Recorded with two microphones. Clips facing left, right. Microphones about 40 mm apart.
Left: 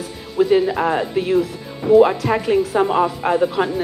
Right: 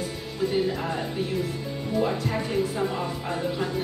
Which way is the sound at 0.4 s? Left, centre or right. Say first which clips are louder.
Left 10 dB; left.